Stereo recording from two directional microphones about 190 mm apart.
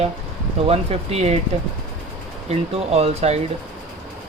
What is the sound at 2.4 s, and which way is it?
Speech, 35° right (ahead or behind).